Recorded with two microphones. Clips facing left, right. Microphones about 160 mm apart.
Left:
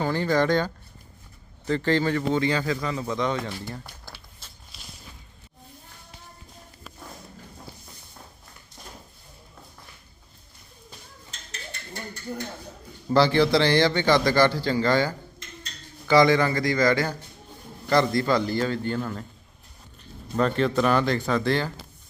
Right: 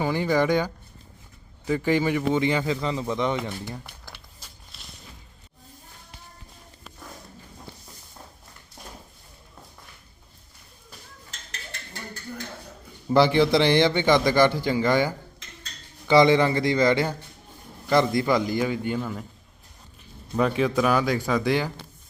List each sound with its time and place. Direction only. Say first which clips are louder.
0.0 s a man's voice: even; 15° right (ahead or behind)
4.4 s walk: right 1 dB; 10° right (ahead or behind)
13.1 s a man's voice: right 1 dB; 20° right (ahead or behind)
20.3 s a man's voice: even; 5° right (ahead or behind)